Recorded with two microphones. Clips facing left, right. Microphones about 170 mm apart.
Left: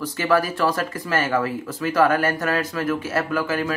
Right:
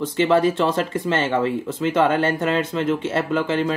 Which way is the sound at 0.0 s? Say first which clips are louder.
Right 4 dB; 25° right (ahead or behind).